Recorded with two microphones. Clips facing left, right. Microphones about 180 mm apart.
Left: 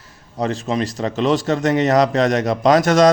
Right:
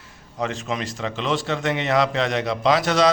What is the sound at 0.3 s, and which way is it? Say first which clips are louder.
A man's voice: left 6 dB; 35° left (ahead or behind).